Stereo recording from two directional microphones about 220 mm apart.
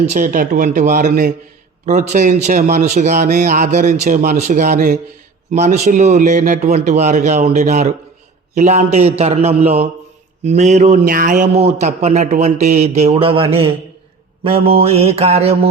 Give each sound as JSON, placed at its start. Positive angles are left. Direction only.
{"t": 0.0, "sound": "a man's voice", "side_deg": -35}